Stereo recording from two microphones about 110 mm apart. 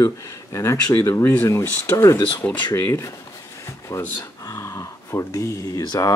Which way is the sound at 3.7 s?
25° left (ahead or behind).